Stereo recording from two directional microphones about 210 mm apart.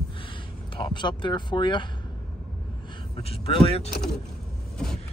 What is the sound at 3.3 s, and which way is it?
Speech, 25° left (ahead or behind).